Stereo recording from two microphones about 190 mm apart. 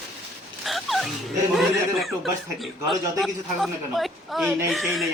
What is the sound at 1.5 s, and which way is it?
Speech, centre (ahead or behind).